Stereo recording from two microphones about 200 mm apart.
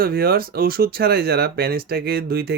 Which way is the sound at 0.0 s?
50° right (ahead or behind).